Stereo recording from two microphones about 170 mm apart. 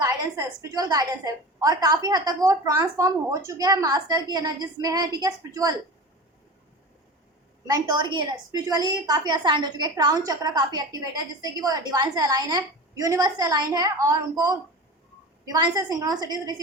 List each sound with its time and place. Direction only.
0.0 s a woman's voice: 20° right (ahead or behind)
7.7 s a woman's voice: 25° right (ahead or behind)